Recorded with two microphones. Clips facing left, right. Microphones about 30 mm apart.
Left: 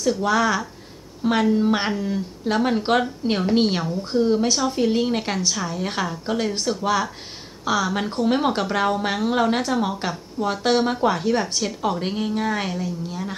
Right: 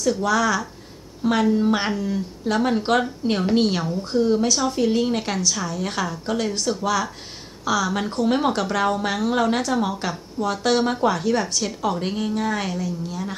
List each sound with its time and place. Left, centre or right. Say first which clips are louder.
0.0 s speech: even; left
1.2 s a woman's voice: even; centre
8.5 s a woman's voice: even; centre